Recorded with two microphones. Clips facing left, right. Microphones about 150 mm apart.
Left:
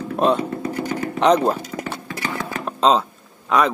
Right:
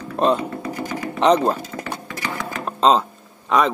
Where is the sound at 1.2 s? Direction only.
Centre (ahead or behind).